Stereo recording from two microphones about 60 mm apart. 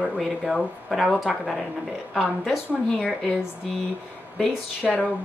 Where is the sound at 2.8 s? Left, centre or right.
Centre.